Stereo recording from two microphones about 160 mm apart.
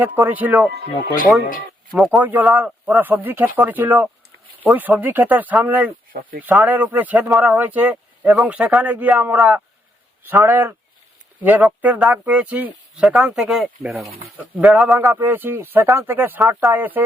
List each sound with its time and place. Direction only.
0.0 s speech: 10° right (ahead or behind)
0.7 s speech: 90° right
2.0 s speech: 10° right (ahead or behind)
15.0 s speech: 15° right (ahead or behind)